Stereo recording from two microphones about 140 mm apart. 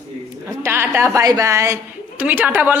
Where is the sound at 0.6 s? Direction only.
15° right (ahead or behind).